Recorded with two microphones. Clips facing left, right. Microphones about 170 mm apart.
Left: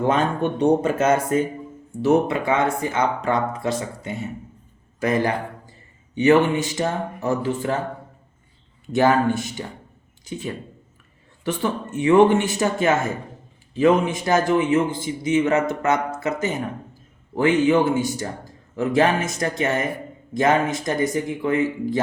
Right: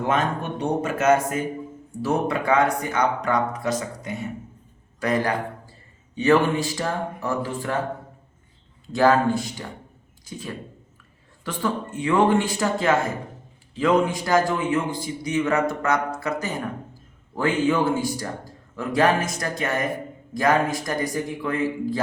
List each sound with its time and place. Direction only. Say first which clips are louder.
0.1 s a man's voice: left 3 dB; 30° left (ahead or behind)
8.9 s a man's voice: left 1 dB; 20° left (ahead or behind)